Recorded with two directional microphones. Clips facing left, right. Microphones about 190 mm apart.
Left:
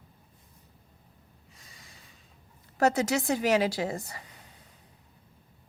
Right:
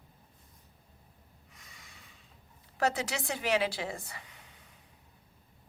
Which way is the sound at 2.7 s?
45° left (ahead or behind).